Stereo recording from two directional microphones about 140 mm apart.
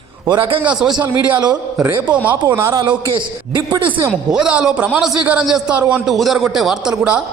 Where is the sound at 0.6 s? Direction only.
5° right (ahead or behind).